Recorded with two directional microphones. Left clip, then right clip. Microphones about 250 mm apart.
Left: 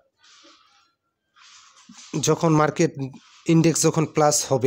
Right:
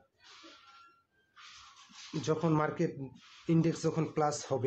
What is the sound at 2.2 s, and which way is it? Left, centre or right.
Speech, left.